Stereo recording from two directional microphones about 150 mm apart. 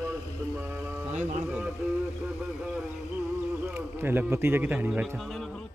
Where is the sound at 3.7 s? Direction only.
15° right (ahead or behind).